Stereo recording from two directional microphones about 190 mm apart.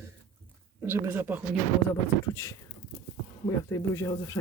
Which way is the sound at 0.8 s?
10° right (ahead or behind).